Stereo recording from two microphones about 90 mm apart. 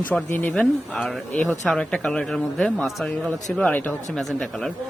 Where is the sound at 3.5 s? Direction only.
15° left (ahead or behind).